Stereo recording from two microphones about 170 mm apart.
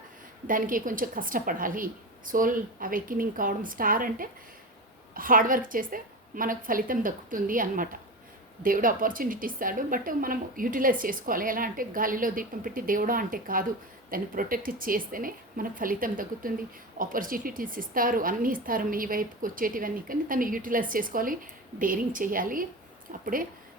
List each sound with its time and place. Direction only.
0.4 s a woman's voice: 55° right (ahead or behind)